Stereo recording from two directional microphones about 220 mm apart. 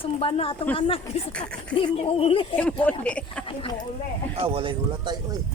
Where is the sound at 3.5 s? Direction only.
25° left (ahead or behind).